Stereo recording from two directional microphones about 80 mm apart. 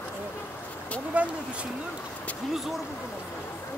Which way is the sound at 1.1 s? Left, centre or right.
Centre.